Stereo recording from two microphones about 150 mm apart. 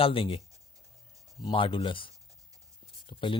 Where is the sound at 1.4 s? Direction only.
35° left (ahead or behind).